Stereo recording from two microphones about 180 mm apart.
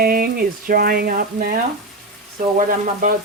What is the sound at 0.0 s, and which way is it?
Speech, 55° right (ahead or behind).